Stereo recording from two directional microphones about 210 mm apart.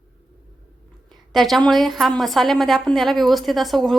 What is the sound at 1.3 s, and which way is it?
A woman's voice, centre (ahead or behind).